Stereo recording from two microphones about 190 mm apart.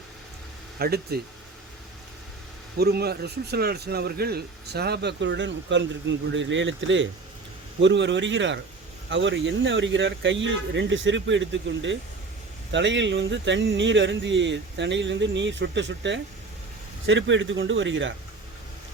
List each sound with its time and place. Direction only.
0.8 s speech: 55° right (ahead or behind)
2.7 s speech: 60° right (ahead or behind); by 7.1 s 80° right
7.8 s speech: 65° right (ahead or behind)